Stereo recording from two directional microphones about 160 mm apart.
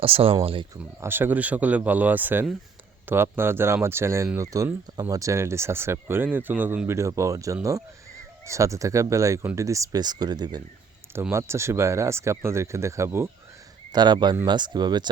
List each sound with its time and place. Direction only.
0.0 s speech: 35° right (ahead or behind)
1.0 s speech: 15° right (ahead or behind)
13.9 s speech: 25° right (ahead or behind)